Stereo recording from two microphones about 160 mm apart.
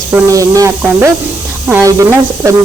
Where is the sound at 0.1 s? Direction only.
20° right (ahead or behind).